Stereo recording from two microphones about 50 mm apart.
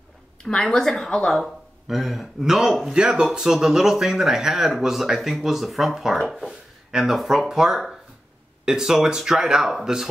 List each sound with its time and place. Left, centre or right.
0.4 s speech: centre
1.4 s speech: centre
6.4 s speech: centre